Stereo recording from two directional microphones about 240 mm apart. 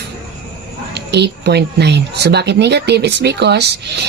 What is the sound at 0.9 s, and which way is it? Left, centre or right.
Speech, right.